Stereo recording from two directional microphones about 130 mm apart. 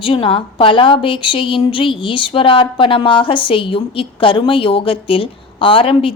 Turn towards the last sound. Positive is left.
turn(degrees=45)  # may be behind; listen again after turning